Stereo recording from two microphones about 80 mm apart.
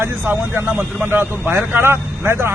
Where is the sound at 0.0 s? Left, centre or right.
Right.